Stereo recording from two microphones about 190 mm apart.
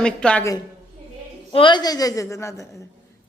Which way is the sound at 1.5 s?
25° left (ahead or behind).